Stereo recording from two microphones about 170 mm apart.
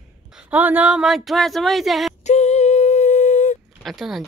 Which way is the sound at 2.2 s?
40° left (ahead or behind).